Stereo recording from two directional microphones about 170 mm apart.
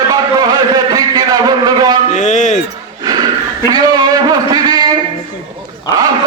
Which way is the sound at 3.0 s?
25° right (ahead or behind).